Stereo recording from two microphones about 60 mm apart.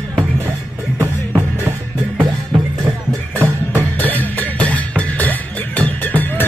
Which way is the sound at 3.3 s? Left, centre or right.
Right.